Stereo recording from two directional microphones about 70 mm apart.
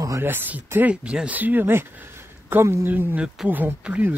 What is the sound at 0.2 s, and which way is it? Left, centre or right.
Speech, right.